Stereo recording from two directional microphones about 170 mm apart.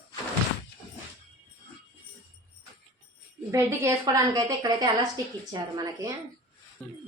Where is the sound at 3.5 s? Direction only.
15° right (ahead or behind).